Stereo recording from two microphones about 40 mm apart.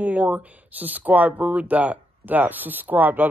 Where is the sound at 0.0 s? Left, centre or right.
Right.